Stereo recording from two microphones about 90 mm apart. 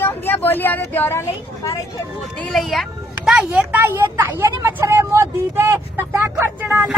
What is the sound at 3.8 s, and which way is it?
Speech, 30° right (ahead or behind).